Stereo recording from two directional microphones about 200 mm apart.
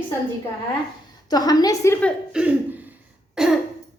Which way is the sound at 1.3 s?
20° left (ahead or behind).